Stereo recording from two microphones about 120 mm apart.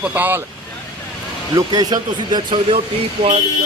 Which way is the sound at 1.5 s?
35° right (ahead or behind).